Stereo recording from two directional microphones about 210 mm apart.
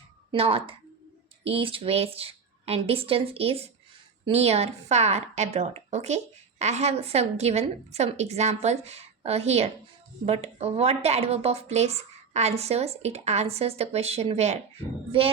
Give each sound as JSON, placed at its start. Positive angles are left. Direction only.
{"t": 0.3, "sound": "a woman's voice", "side_deg": -25}